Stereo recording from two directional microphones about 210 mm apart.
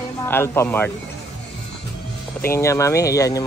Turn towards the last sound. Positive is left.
turn(degrees=15)  # may be behind; listen again after turning